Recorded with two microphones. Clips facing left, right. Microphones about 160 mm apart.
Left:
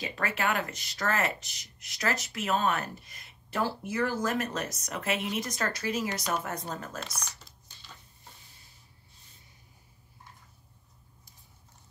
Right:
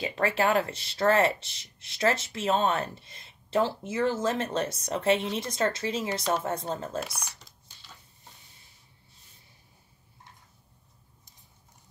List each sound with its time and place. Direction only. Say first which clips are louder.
0.0 s speech: right 5 dB; 30° right (ahead or behind)
7.0 s speech: right 5 dB; 5° right (ahead or behind)